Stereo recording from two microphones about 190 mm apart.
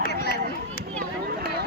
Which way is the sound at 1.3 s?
50° right (ahead or behind).